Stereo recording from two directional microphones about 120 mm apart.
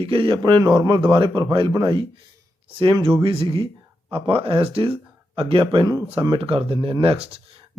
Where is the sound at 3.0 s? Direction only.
45° right (ahead or behind).